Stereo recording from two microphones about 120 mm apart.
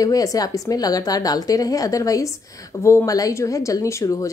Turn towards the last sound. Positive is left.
turn(degrees=25)  # may be behind; listen again after turning